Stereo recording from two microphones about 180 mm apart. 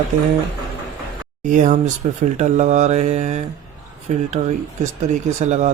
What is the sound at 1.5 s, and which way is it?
Speech, 45° right (ahead or behind).